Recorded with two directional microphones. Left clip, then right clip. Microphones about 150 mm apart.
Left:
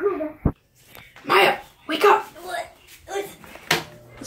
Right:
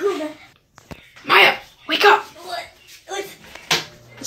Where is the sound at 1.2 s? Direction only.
10° left (ahead or behind).